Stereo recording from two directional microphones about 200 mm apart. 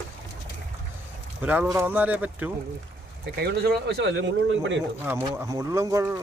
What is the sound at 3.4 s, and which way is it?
Speech, 50° right (ahead or behind).